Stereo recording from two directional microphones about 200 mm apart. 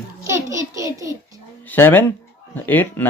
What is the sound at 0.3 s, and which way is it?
Speech, 15° right (ahead or behind).